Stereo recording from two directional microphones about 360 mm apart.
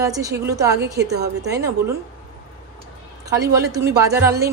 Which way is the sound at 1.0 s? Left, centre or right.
Right.